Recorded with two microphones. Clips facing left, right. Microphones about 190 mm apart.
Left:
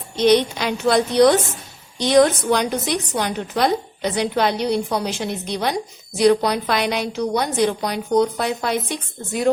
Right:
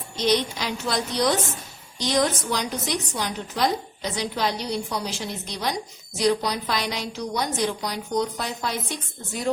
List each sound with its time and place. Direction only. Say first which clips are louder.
0.2 s a woman's voice: left 7 dB; 60° left (ahead or behind)